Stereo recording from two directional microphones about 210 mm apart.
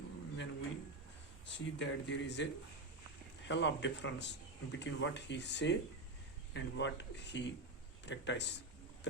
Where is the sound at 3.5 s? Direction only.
55° left (ahead or behind).